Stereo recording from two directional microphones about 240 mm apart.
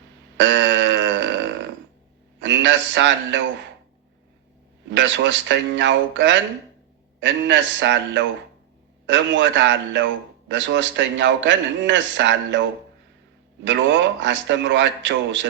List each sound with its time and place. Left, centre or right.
0.3 s burping: right
2.4 s a man's voice: right
4.9 s a man's voice: right